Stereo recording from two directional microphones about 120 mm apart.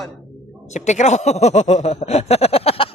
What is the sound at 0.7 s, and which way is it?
Speech, 80° left.